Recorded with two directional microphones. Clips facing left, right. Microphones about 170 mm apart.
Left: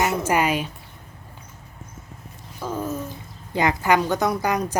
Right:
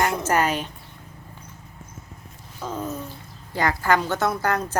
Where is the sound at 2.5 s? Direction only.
10° left (ahead or behind).